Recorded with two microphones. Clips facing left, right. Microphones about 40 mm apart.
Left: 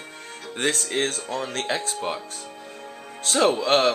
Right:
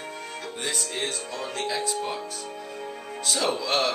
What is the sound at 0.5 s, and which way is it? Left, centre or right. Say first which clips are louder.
Speech: left 7 dB; left.